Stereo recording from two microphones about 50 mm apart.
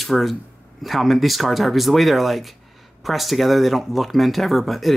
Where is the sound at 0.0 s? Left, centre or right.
Centre.